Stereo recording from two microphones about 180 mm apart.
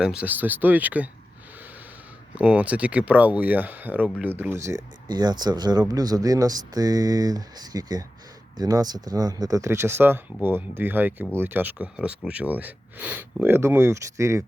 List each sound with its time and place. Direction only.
0.0 s speech: 5° right (ahead or behind)
2.3 s speech: 5° right (ahead or behind)